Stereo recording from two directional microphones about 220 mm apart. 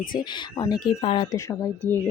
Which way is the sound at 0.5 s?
20° left (ahead or behind).